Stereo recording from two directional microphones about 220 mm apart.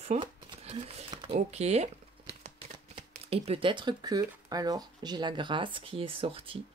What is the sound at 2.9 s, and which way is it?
Speech, 25° right (ahead or behind).